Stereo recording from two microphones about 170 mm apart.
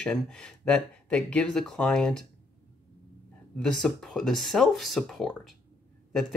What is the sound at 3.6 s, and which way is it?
Speech, 5° left (ahead or behind).